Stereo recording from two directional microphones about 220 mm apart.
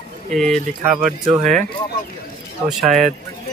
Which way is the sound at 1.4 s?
35° right (ahead or behind).